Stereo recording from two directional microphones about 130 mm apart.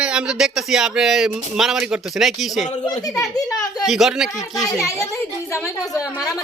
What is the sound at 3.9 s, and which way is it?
Speech, 5° right (ahead or behind).